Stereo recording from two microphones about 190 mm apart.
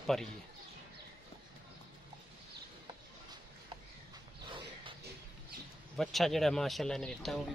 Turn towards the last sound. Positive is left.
turn(degrees=0)  # may be behind; listen again after turning